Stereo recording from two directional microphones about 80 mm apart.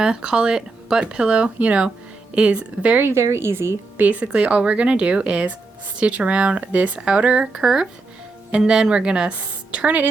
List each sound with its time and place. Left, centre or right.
0.0 s speech: centre
3.0 s a woman's voice: right
4.0 s speech: centre